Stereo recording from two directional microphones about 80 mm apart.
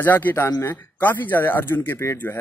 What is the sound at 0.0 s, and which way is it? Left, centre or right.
Speech, left.